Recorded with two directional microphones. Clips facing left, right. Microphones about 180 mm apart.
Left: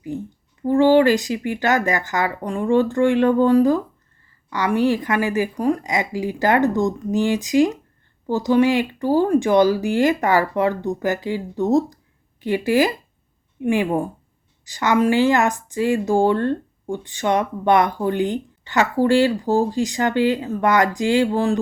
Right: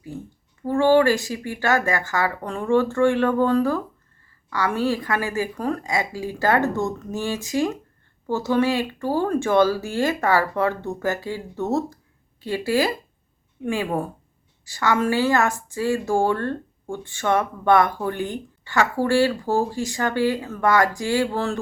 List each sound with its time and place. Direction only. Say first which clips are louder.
0.6 s a woman's voice: left 3 dB; 15° left (ahead or behind)